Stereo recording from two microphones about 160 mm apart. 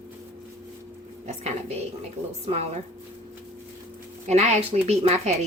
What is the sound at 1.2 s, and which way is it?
Speech, 45° right (ahead or behind).